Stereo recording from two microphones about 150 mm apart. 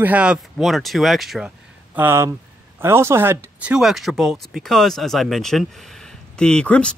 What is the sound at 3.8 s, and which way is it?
Speech, centre (ahead or behind).